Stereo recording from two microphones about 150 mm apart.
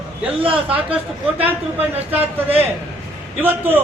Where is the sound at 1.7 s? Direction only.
10° right (ahead or behind).